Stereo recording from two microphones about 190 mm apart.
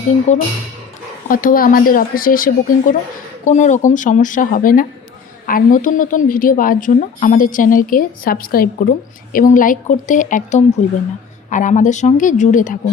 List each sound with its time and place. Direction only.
0.3 s a woman's voice: 40° left (ahead or behind)